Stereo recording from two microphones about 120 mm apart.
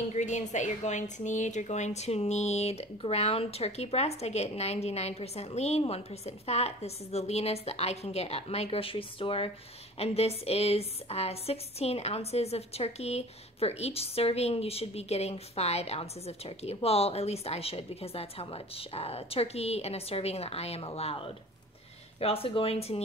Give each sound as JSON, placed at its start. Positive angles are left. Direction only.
{"t": 0.1, "sound": "a woman's voice", "side_deg": 80}